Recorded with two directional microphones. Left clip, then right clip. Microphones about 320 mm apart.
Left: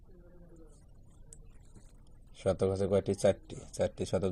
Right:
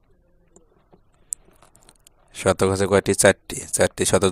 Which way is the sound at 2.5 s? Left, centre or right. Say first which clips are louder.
Right 11 dB; right.